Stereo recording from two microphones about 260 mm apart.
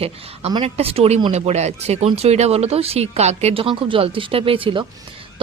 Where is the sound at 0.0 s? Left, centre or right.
Right.